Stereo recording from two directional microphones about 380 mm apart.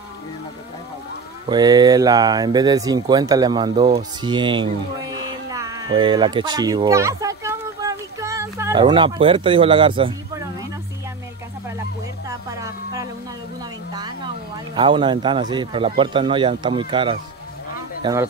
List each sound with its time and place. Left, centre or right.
1.5 s speech: centre
12.3 s music: centre
13.9 s a sound: centre
14.8 s speech: centre